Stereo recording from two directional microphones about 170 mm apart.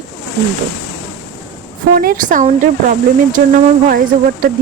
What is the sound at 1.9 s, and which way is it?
A woman's voice, 60° right (ahead or behind).